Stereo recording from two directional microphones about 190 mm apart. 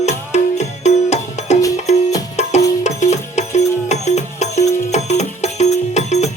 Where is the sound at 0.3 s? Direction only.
35° left (ahead or behind).